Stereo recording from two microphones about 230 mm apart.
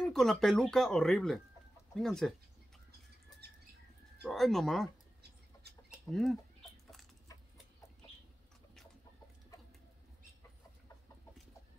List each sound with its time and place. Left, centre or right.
0.1 s speech: centre
3.4 s bird flight: right
4.2 s speech: centre
5.7 s chicken: centre